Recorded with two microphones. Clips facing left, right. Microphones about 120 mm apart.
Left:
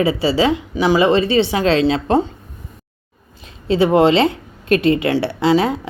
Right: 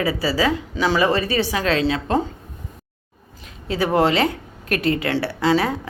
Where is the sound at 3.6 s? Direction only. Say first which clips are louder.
Left 6 dB; 25° left (ahead or behind).